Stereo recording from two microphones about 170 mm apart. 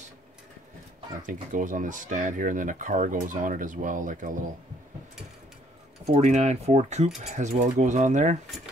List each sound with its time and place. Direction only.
1.2 s speech: 50° right (ahead or behind)
6.0 s speech: 40° right (ahead or behind)